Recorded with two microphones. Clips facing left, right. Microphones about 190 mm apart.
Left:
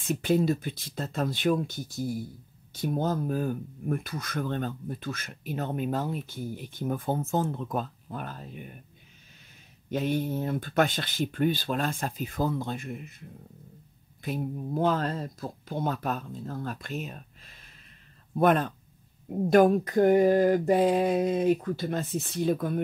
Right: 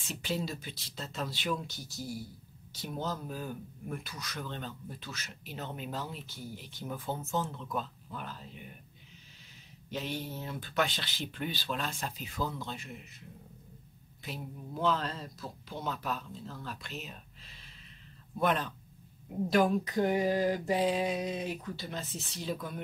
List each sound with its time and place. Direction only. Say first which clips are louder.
0.0 s speech: left 11 dB; 55° left (ahead or behind)
9.8 s speech: left 9 dB; 50° left (ahead or behind)
14.2 s speech: left 10 dB; 50° left (ahead or behind)